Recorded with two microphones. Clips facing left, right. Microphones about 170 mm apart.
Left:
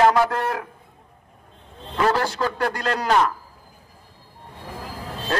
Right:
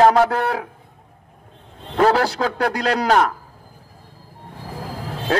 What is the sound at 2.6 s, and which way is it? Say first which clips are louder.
Speech: right 7 dB; 65° right (ahead or behind).